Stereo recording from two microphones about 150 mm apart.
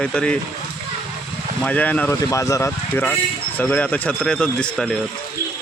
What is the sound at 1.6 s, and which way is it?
Speech, 10° left (ahead or behind).